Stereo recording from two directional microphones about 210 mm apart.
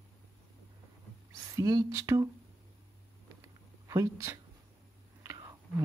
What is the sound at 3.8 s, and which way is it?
Speech, 15° right (ahead or behind).